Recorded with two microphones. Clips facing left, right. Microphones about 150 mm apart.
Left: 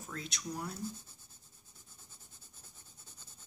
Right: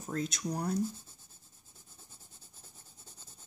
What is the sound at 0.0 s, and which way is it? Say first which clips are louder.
Speech: right 8 dB; 40° right (ahead or behind).